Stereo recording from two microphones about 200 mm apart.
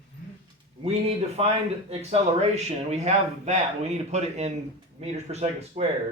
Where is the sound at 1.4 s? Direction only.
30° right (ahead or behind).